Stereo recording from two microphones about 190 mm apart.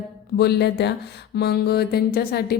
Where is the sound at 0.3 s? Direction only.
60° left (ahead or behind).